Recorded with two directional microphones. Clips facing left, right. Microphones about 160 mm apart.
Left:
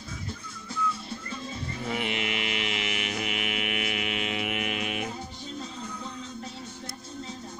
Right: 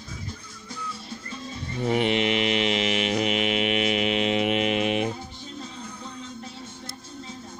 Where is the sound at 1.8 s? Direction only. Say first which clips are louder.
Right 9 dB; 30° right (ahead or behind).